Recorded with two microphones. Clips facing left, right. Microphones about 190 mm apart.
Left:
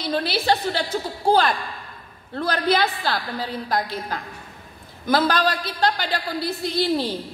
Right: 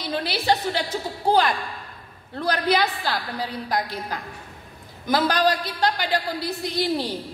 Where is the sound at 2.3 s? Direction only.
15° right (ahead or behind).